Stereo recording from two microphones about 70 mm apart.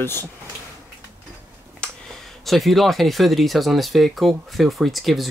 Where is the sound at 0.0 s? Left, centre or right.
Left.